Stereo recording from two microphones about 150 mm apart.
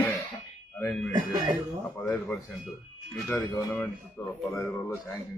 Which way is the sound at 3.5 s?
10° left (ahead or behind).